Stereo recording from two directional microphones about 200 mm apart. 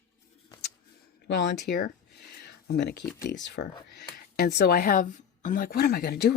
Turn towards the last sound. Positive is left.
turn(degrees=55)  # may be behind; listen again after turning